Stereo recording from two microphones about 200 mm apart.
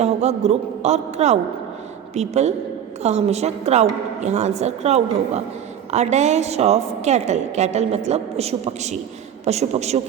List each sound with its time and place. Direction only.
0.0 s a woman's voice: 35° right (ahead or behind)